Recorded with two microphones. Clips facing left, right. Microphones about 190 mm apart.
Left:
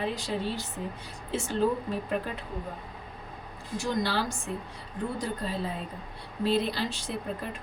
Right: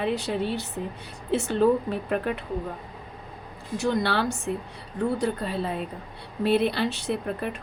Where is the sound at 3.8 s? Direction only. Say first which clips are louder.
Right 4 dB; 65° right (ahead or behind).